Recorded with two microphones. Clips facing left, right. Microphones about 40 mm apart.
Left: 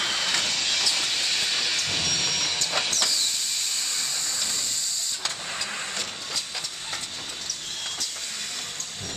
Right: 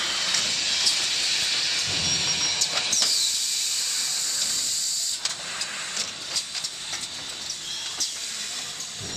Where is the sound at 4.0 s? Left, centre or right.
Left.